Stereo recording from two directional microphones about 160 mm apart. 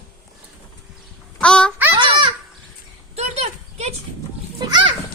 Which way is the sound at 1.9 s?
30° right (ahead or behind).